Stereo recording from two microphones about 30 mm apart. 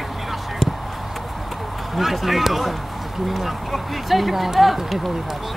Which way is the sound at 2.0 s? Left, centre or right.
Centre.